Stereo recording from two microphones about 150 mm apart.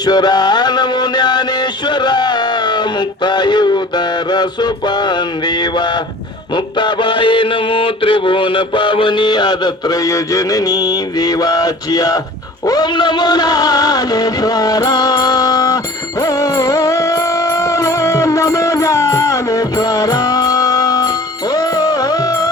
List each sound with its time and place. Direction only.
0.0 s music: 30° left (ahead or behind)